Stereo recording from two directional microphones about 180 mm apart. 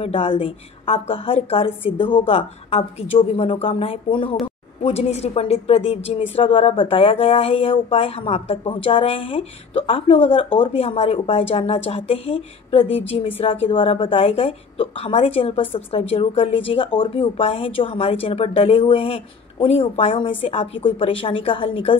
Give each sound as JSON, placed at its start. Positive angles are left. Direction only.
{"t": 0.0, "sound": "a woman's voice", "side_deg": 30}